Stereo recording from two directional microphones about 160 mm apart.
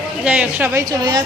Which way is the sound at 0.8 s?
25° right (ahead or behind).